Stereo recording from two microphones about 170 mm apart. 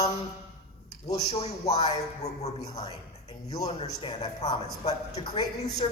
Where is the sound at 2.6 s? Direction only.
20° left (ahead or behind).